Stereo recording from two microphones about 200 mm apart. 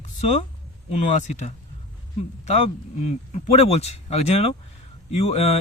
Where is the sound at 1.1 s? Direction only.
35° left (ahead or behind).